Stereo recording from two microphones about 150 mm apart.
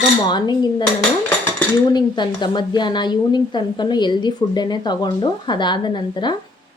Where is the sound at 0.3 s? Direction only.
30° left (ahead or behind).